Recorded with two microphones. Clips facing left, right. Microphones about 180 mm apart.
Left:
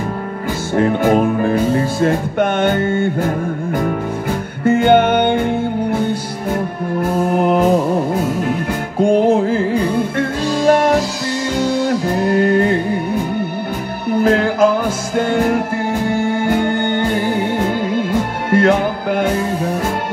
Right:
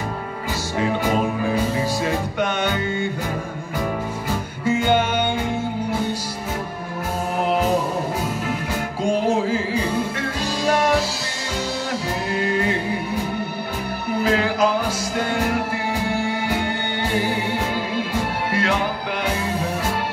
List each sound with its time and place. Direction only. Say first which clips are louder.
0.7 s music: left 8 dB; 55° left (ahead or behind)
7.0 s music: left 8 dB; 55° left (ahead or behind)
9.0 s music: left 8 dB; 55° left (ahead or behind)
12.3 s music: left 9 dB; 55° left (ahead or behind)
14.2 s music: left 6 dB; 50° left (ahead or behind)